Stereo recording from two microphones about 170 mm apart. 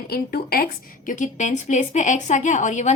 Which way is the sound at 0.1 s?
60° left (ahead or behind).